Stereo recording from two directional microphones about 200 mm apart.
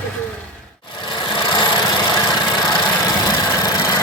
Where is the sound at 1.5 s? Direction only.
20° left (ahead or behind).